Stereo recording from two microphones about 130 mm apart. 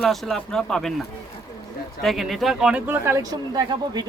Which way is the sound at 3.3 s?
30° right (ahead or behind).